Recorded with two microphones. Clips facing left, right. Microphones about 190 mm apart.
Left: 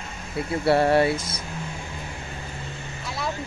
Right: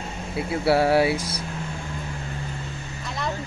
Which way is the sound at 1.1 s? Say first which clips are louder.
Right 2 dB; 35° right (ahead or behind).